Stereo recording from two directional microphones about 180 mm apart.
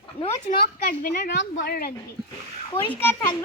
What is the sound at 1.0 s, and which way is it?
Speech, 65° left (ahead or behind).